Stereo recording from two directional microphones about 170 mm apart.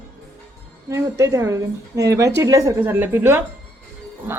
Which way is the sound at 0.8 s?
20° right (ahead or behind).